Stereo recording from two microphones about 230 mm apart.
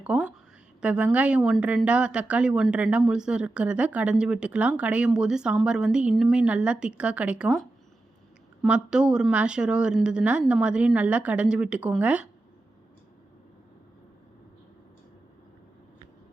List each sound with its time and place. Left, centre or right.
0.0 s speech: centre
8.6 s speech: centre